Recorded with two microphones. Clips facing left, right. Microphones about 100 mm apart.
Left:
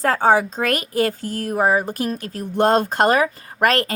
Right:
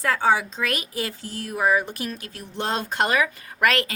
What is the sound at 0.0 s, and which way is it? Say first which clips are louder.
A woman's voice: left 5 dB; 40° left (ahead or behind).